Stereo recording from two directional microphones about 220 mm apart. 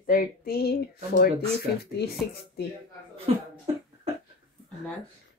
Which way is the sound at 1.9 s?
45° left (ahead or behind).